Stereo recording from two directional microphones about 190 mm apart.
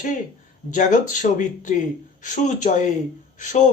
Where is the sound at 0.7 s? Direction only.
40° left (ahead or behind).